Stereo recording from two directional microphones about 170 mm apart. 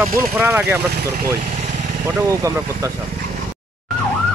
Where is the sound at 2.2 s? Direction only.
20° right (ahead or behind).